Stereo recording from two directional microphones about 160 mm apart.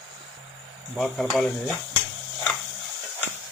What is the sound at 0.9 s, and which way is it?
Speech, centre (ahead or behind).